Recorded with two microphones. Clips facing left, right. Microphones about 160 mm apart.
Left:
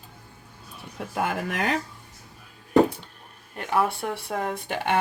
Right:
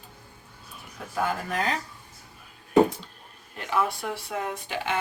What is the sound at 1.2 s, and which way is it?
Speech, 70° left (ahead or behind).